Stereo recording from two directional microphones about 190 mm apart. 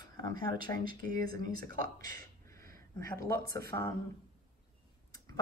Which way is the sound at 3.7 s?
25° left (ahead or behind).